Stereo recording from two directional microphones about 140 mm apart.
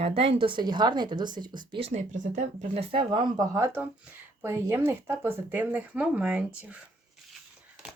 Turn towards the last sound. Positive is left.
turn(degrees=-10)  # may be behind; listen again after turning